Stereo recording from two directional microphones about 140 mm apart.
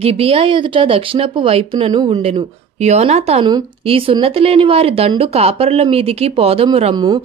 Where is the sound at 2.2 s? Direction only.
45° right (ahead or behind).